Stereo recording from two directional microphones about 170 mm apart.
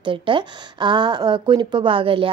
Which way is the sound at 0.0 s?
30° right (ahead or behind).